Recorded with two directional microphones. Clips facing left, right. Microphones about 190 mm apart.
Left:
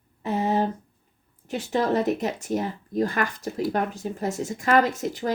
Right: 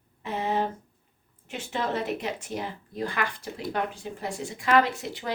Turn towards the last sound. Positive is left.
turn(degrees=45)  # may be behind; listen again after turning